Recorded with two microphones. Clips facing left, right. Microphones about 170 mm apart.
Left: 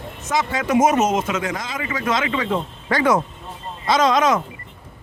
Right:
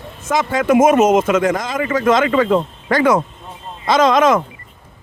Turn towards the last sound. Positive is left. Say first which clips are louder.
# right 4 dB
turn(degrees=-55)  # may be behind; listen again after turning